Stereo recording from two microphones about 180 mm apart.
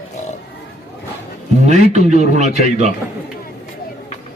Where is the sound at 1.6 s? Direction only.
40° right (ahead or behind).